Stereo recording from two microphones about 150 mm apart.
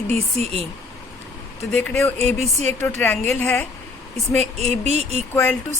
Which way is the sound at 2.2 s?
45° right (ahead or behind).